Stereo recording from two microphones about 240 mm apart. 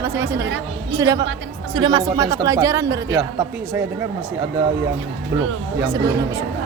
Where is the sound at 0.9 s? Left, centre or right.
Centre.